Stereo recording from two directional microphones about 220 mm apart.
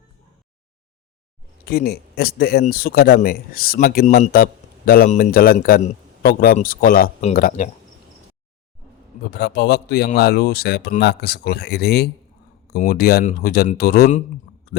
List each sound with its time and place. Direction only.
1.6 s a man's voice: 45° left (ahead or behind)
9.3 s speech: 45° left (ahead or behind)